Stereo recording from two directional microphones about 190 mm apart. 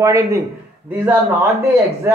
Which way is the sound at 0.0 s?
15° right (ahead or behind).